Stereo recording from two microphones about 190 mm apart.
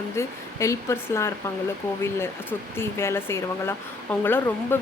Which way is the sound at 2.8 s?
10° left (ahead or behind).